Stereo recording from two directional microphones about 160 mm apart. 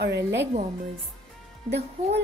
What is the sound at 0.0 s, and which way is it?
Speech, 90° right.